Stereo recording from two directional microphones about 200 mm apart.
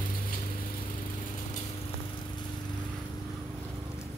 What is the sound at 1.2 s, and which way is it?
Lawn mower, 40° left (ahead or behind).